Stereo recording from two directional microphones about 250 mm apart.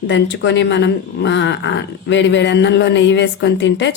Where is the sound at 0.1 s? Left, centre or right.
Left.